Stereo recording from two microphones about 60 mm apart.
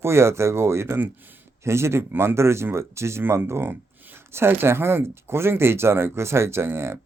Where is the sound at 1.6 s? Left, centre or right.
Right.